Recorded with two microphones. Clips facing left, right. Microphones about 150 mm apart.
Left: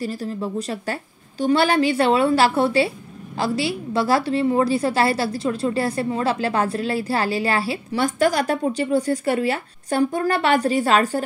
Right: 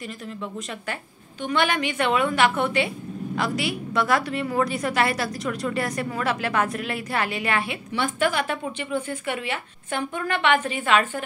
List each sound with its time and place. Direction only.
0.0 s a woman's voice: 35° left (ahead or behind)